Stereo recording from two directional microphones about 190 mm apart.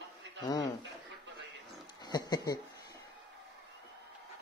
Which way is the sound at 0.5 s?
20° left (ahead or behind).